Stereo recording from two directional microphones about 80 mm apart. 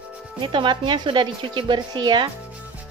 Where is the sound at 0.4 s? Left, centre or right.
Right.